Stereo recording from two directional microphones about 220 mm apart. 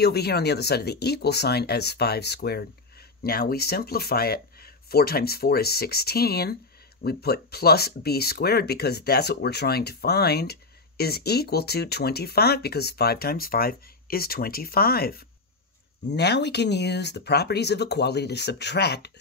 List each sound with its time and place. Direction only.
0.0 s speech: 45° left (ahead or behind)